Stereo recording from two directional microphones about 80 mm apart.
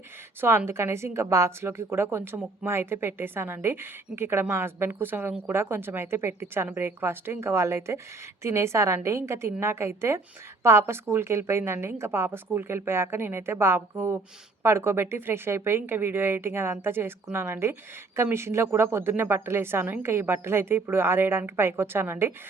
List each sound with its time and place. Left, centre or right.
0.4 s a woman's voice: right